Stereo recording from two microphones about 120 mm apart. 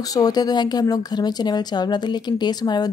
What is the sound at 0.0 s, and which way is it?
A woman's voice, 30° left (ahead or behind).